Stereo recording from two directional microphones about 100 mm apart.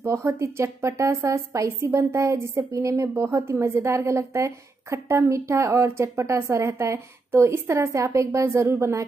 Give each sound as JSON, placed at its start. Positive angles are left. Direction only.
{"t": 0.0, "sound": "a woman's voice", "side_deg": -25}